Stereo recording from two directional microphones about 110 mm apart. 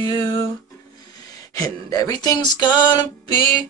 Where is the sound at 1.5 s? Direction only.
35° left (ahead or behind).